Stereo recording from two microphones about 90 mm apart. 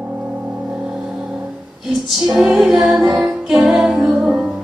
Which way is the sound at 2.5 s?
5° right (ahead or behind).